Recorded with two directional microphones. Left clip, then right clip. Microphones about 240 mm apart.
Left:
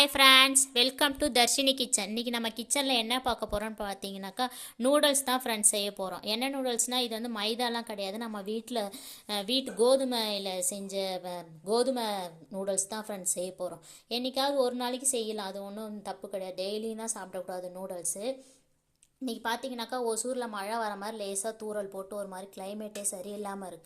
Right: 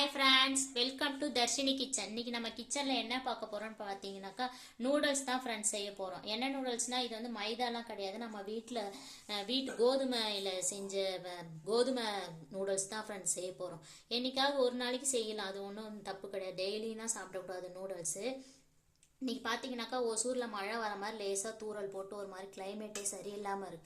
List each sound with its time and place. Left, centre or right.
0.0 s a woman's voice: left